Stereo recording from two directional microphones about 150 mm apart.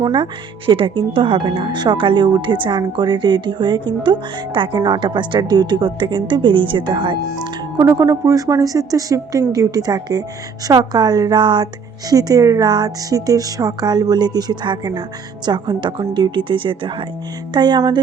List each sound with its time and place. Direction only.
0.0 s speech: 30° right (ahead or behind)
7.8 s speech: 20° right (ahead or behind)